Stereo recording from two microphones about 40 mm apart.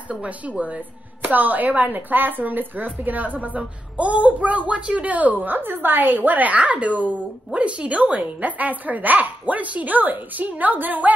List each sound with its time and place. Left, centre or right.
0.1 s speech: right
1.2 s speech: right